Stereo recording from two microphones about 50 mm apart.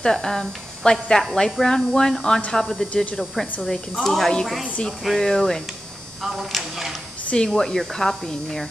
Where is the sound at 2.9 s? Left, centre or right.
Left.